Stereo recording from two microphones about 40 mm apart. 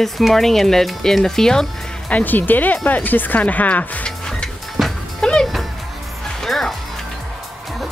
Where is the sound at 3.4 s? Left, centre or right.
Left.